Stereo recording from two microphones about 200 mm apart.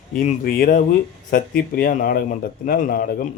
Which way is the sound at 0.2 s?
40° left (ahead or behind).